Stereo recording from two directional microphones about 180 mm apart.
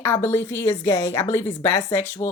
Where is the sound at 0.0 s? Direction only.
15° left (ahead or behind).